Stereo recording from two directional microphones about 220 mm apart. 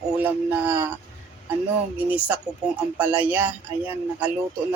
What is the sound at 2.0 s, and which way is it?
Speech, 5° right (ahead or behind).